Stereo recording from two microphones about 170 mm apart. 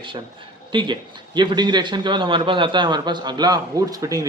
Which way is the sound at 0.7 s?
25° right (ahead or behind).